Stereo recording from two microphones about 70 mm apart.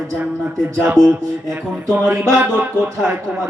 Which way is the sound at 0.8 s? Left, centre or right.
Right.